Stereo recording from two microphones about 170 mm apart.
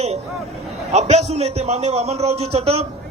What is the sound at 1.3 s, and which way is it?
Speech, 40° right (ahead or behind).